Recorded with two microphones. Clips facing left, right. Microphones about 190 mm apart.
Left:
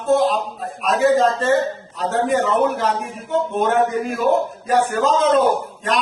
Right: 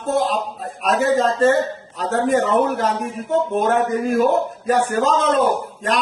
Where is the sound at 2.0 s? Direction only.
40° right (ahead or behind).